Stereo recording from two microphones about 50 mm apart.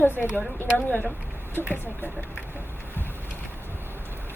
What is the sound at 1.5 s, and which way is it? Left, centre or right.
Speech, left.